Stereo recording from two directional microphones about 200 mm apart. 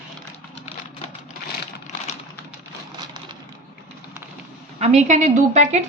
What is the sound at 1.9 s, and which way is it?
Typing, 35° left (ahead or behind).